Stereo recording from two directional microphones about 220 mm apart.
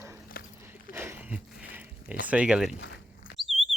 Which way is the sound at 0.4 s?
40° left (ahead or behind).